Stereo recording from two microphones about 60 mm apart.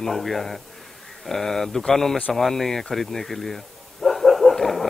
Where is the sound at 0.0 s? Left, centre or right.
Centre.